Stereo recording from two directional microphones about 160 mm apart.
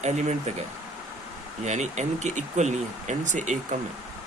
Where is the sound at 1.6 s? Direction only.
45° right (ahead or behind).